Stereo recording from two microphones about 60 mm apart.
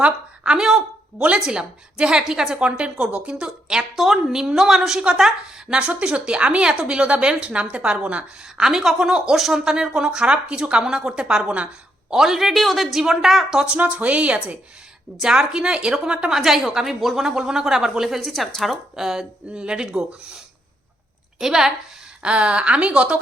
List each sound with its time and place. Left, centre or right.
0.0 s a woman's voice: centre
12.1 s a woman's voice: centre
13.6 s a woman's voice: right